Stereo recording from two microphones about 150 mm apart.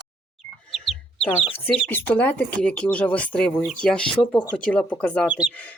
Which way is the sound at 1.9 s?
10° left (ahead or behind).